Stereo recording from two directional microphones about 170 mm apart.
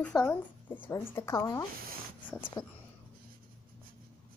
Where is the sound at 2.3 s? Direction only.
30° left (ahead or behind).